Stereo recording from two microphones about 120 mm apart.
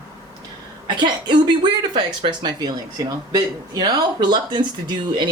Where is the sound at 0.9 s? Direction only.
40° right (ahead or behind).